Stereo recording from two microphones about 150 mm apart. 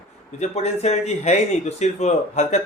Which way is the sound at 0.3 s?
45° left (ahead or behind).